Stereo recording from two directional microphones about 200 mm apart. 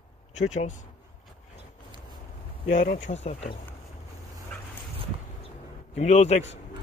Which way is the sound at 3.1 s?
35° left (ahead or behind).